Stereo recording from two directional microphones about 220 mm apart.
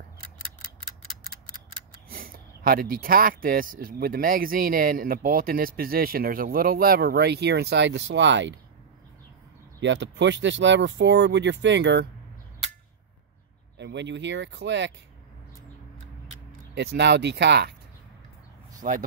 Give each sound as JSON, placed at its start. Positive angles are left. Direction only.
{"t": 2.0, "sound": "speech", "side_deg": -40}
{"t": 9.8, "sound": "speech", "side_deg": -55}
{"t": 13.7, "sound": "speech", "side_deg": -50}
{"t": 16.7, "sound": "speech", "side_deg": -50}
{"t": 18.8, "sound": "speech", "side_deg": -35}